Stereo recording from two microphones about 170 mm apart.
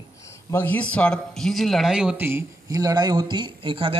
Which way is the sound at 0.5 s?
10° left (ahead or behind).